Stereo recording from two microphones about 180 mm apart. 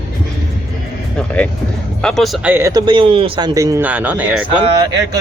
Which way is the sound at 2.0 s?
Centre (ahead or behind).